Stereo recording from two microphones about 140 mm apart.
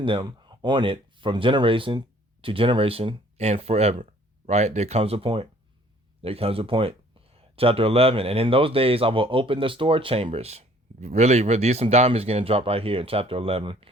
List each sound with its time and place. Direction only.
0.0 s speech: 35° right (ahead or behind)